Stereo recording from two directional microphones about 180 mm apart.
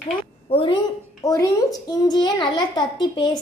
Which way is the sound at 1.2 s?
20° left (ahead or behind).